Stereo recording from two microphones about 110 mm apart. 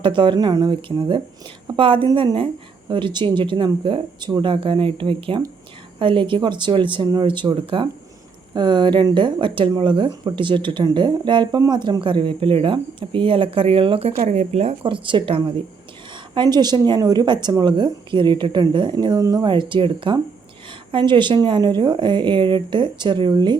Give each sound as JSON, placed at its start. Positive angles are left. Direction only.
{"t": 0.0, "sound": "speech", "side_deg": -50}
{"t": 0.3, "sound": "a woman's voice", "side_deg": -35}
{"t": 14.3, "sound": "speech", "side_deg": -80}
{"t": 14.8, "sound": "a woman's voice", "side_deg": -50}